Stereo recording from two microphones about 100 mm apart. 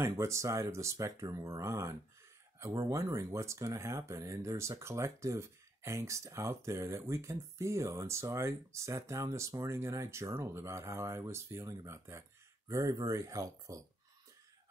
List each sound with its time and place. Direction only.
0.0 s speech: 30° right (ahead or behind)